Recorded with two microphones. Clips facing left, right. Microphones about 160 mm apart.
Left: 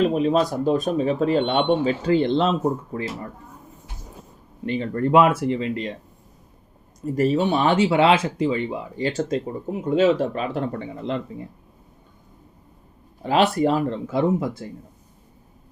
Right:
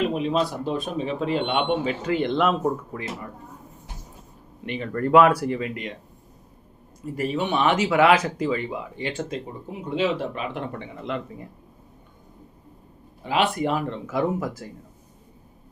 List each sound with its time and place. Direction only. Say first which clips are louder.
0.0 s speech: left 4 dB; 40° left (ahead or behind)
4.6 s speech: left 3 dB; 30° left (ahead or behind)
7.0 s speech: left 6 dB; 40° left (ahead or behind)
13.2 s speech: left 4 dB; 40° left (ahead or behind)